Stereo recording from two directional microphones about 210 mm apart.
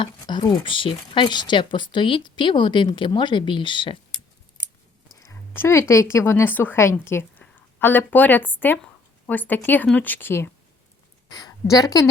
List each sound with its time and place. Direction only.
0.0 s speech: 20° left (ahead or behind)
5.2 s a woman's voice: 15° left (ahead or behind)